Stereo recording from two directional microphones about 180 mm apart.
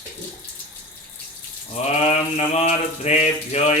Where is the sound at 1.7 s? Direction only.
35° left (ahead or behind).